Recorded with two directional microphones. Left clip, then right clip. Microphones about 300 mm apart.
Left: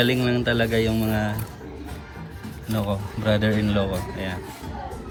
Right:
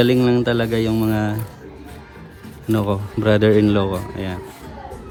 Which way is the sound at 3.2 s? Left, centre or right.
Right.